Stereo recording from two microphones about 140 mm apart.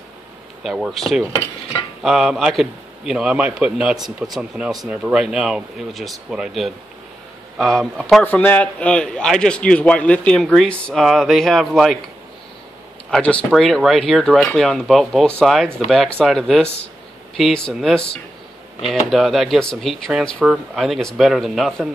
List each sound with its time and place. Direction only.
0.7 s a man's voice: 5° right (ahead or behind)
1.3 s cutlery: 25° left (ahead or behind)
2.0 s a man's voice: centre (ahead or behind)
8.2 s a man's voice: 10° left (ahead or behind)
13.1 s a man's voice: 10° left (ahead or behind)